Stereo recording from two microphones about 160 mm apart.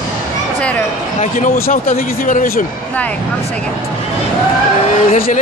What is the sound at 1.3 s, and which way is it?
Speech, 65° left (ahead or behind).